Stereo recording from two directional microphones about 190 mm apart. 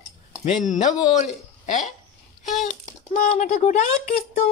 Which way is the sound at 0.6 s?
40° left (ahead or behind).